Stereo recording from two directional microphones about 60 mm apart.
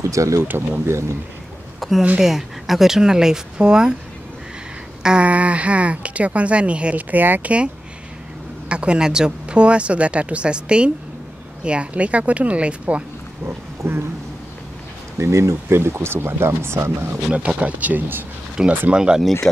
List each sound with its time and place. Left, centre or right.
0.1 s speech: right
0.5 s speech: right
1.8 s speech: centre
5.0 s speech: centre
8.6 s speech: centre
13.8 s speech: right
15.1 s speech: right
17.3 s speech: centre
18.6 s speech: centre
19.4 s speech: centre